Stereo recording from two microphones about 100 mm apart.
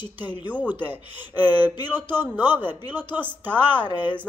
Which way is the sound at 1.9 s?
20° right (ahead or behind).